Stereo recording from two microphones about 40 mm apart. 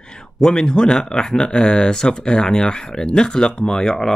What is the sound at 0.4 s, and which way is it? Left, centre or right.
Speech, centre.